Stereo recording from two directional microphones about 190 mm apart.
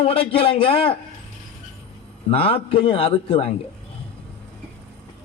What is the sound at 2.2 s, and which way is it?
A man's voice, 30° left (ahead or behind).